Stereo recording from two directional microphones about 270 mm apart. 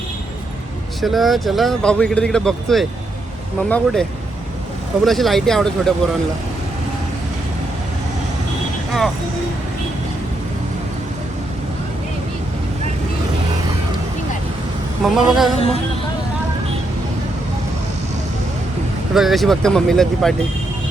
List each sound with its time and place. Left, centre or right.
1.0 s speech: centre
5.0 s speech: centre
15.0 s speech: centre
19.1 s speech: centre